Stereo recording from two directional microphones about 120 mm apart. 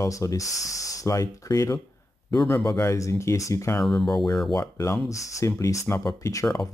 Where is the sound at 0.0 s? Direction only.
25° left (ahead or behind).